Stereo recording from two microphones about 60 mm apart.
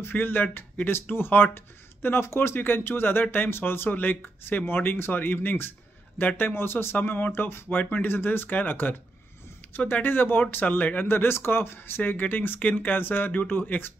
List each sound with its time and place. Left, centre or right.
0.0 s speech: left
10.0 s speech: left
12.0 s speech: left